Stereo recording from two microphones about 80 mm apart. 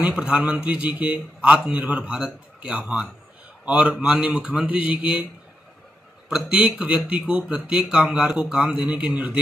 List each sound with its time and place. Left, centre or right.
0.0 s a man's voice: centre
6.2 s a man's voice: centre